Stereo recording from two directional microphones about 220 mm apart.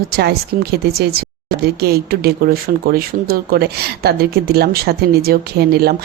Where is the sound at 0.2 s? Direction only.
45° right (ahead or behind).